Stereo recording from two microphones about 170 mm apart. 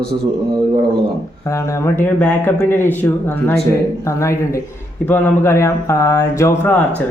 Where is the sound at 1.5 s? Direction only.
15° left (ahead or behind).